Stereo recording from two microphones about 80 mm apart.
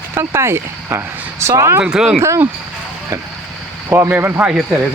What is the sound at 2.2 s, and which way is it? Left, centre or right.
Speech, right.